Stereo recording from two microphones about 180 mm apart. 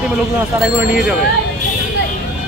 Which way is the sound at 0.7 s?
5° right (ahead or behind).